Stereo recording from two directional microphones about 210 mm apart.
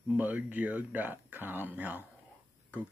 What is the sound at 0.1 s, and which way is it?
Speech, 5° right (ahead or behind).